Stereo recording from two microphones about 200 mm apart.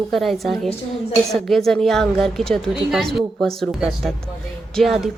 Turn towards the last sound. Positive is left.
turn(degrees=0)  # may be behind; listen again after turning